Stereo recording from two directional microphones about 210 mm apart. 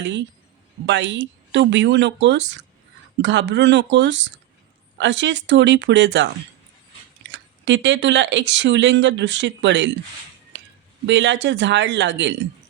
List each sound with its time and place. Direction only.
0.0 s speech: 55° right (ahead or behind)
7.3 s speech: 60° right (ahead or behind)
11.0 s speech: 60° right (ahead or behind)